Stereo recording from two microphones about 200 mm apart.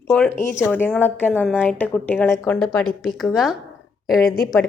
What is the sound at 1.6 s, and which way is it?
A woman's voice, 10° left (ahead or behind).